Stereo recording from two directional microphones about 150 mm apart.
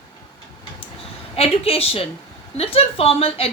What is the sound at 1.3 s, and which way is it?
A woman's voice, 40° left (ahead or behind).